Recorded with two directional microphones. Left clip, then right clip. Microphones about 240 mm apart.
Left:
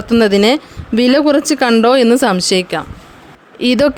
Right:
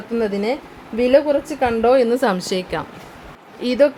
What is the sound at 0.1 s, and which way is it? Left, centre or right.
Speech, left.